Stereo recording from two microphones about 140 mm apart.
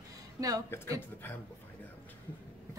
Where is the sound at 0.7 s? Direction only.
15° left (ahead or behind).